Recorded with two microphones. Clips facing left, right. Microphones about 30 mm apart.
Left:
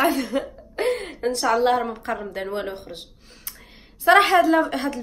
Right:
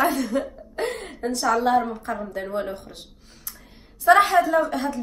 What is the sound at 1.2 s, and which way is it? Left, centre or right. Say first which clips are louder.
A woman's voice: left 1 dB; left.